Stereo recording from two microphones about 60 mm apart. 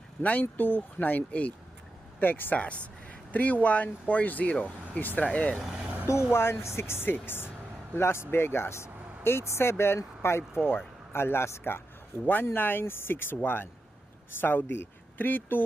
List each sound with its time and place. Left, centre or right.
0.2 s speech: left
2.1 s speech: left
2.6 s speech: left
5.8 s vehicle: right
6.3 s speech: left
12.2 s speech: left